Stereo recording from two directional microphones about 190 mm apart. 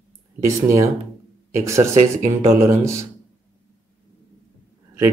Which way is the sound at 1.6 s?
15° right (ahead or behind).